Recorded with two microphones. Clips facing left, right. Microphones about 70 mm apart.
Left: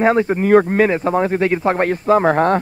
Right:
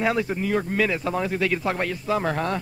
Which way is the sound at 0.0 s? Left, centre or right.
Left.